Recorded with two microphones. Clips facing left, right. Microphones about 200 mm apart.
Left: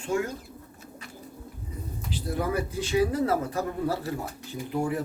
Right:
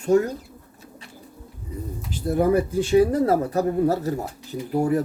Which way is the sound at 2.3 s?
50° right (ahead or behind).